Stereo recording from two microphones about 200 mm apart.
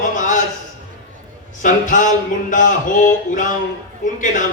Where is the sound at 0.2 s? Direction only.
40° left (ahead or behind).